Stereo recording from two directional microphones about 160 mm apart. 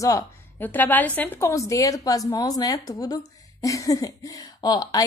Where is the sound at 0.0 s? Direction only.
15° left (ahead or behind).